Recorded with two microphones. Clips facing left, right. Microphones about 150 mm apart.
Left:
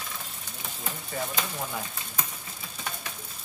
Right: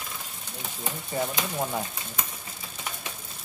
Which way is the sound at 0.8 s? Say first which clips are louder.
Right 4 dB; 20° right (ahead or behind).